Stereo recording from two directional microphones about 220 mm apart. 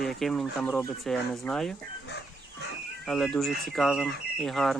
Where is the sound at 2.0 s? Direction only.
50° left (ahead or behind).